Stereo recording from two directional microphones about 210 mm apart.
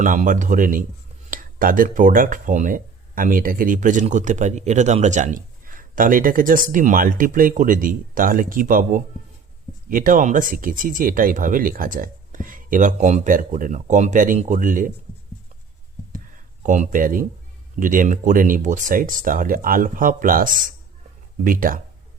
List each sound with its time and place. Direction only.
0.0 s speech: 40° right (ahead or behind)
16.1 s a sound: 40° right (ahead or behind)
17.7 s speech: 40° right (ahead or behind)